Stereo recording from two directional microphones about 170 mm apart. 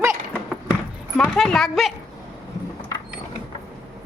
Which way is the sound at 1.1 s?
Centre (ahead or behind).